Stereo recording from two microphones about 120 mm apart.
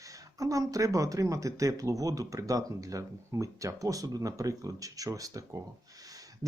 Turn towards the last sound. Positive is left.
turn(degrees=-30)  # may be behind; listen again after turning